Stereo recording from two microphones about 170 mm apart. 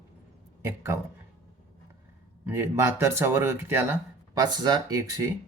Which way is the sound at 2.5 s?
15° right (ahead or behind).